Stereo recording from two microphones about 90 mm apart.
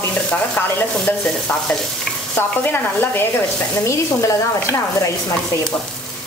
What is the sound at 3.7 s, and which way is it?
Speech, 30° left (ahead or behind).